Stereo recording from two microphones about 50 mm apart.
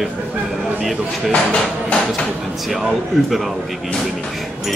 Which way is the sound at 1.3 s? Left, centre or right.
Left.